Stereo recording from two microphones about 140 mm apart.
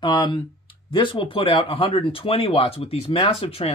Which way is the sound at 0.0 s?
35° left (ahead or behind).